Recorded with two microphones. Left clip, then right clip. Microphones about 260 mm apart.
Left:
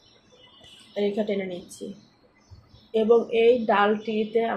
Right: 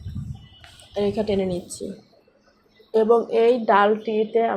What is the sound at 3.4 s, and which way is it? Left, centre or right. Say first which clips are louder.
Speech: right 3 dB; centre.